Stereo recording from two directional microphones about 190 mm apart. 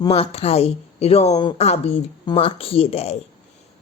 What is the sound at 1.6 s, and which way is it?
Speech, 35° left (ahead or behind).